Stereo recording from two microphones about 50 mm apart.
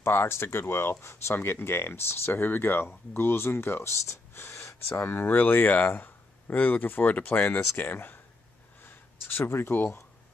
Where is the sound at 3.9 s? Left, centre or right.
Left.